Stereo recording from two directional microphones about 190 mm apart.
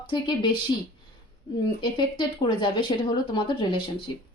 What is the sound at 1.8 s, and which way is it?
Speech, 25° left (ahead or behind).